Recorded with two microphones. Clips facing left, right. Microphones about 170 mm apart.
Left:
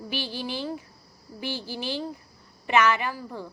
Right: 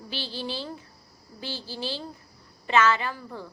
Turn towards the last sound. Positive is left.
turn(degrees=15)  # may be behind; listen again after turning